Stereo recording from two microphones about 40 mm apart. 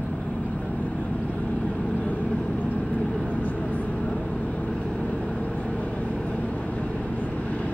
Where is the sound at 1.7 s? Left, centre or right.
Left.